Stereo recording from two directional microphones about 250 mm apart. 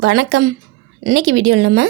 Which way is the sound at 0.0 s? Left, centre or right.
Right.